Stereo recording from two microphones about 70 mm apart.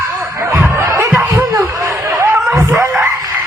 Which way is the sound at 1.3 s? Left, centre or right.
Right.